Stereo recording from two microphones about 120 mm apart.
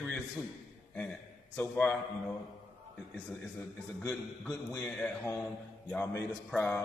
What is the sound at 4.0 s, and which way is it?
Speech, 20° left (ahead or behind).